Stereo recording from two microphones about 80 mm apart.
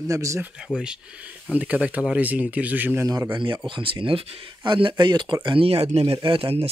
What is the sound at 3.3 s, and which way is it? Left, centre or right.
Speech, right.